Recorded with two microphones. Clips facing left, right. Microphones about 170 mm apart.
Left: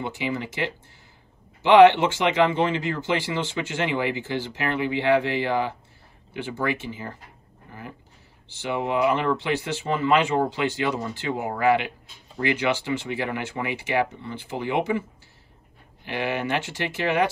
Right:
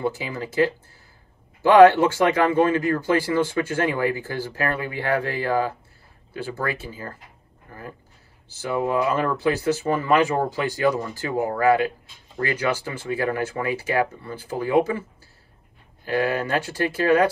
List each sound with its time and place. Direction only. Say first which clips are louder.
0.0 s speech: right 2 dB; 20° left (ahead or behind)
8.6 s speech: right 1 dB; 20° left (ahead or behind)